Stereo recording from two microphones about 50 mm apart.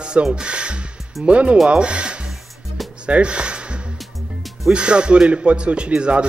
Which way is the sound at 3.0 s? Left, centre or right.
Right.